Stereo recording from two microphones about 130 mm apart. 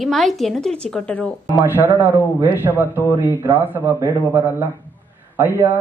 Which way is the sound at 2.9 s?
20° left (ahead or behind).